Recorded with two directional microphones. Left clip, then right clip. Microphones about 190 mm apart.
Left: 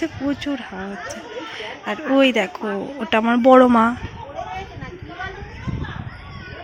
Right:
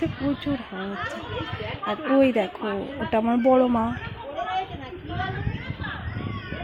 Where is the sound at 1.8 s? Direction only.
5° left (ahead or behind).